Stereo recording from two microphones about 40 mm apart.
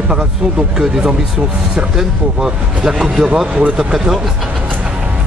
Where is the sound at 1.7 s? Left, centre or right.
Centre.